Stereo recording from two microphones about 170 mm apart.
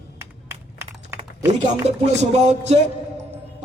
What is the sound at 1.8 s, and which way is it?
Speech, 40° right (ahead or behind).